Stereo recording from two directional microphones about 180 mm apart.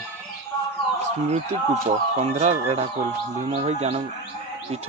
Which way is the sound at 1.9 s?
40° right (ahead or behind).